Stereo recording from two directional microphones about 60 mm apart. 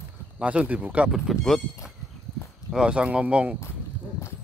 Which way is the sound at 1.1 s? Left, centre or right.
Centre.